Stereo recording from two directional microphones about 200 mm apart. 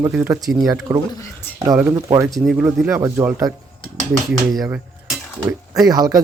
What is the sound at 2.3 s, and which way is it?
Speech, centre (ahead or behind).